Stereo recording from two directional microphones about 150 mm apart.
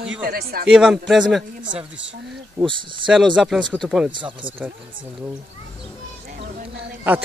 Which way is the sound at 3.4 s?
5° right (ahead or behind).